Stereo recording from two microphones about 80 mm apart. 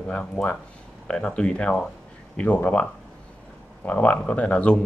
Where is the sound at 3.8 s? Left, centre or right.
Centre.